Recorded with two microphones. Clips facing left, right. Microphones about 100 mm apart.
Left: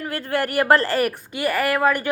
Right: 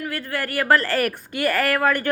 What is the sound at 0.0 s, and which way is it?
A woman's voice, 30° left (ahead or behind).